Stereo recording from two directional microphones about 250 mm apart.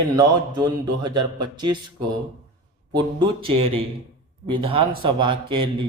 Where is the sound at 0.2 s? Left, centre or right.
Centre.